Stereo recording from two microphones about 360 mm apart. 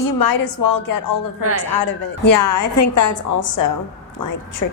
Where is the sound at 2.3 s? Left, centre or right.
Left.